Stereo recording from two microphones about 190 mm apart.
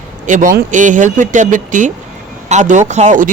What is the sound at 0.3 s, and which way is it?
Speech, 40° right (ahead or behind).